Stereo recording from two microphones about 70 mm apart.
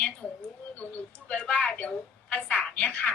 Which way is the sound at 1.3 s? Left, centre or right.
Centre.